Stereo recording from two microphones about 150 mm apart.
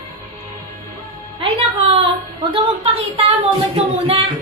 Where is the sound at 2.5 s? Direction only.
40° right (ahead or behind).